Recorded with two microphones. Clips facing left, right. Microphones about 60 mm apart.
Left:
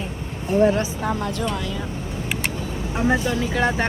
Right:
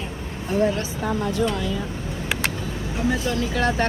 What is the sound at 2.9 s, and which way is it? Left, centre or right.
Speech, left.